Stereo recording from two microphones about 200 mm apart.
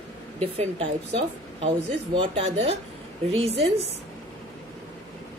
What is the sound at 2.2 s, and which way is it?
Speech, 30° right (ahead or behind).